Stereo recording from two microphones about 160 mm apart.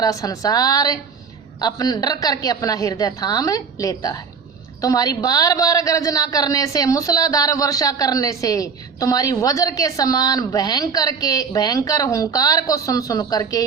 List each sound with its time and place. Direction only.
0.0 s a woman's voice: 20° left (ahead or behind)